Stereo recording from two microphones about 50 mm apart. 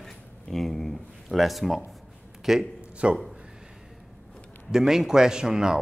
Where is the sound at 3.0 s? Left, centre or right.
Right.